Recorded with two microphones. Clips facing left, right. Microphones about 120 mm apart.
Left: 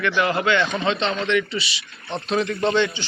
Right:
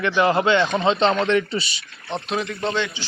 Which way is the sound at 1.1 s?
45° right (ahead or behind).